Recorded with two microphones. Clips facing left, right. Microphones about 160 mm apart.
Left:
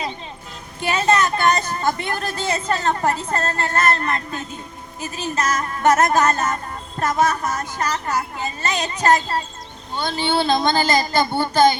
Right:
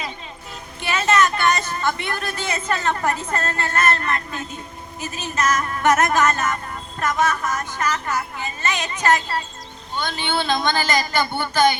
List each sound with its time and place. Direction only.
0.8 s speech: 35° left (ahead or behind)